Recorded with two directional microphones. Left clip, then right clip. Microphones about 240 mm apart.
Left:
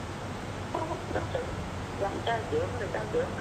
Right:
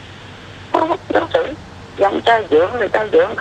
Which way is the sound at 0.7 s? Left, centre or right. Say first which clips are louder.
Right 18 dB; right.